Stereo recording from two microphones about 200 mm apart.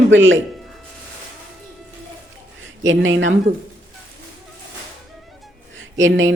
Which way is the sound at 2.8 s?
75° right (ahead or behind).